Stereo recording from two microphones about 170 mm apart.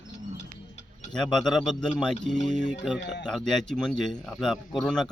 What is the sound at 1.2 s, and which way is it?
Speech, centre (ahead or behind).